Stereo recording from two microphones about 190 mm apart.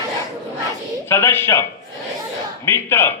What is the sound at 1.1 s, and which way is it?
A man's voice, 10° left (ahead or behind).